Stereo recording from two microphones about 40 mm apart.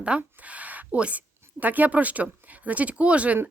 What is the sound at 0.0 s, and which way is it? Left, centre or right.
Speech, right.